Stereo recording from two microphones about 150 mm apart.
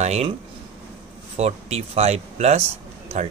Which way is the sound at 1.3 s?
45° right (ahead or behind).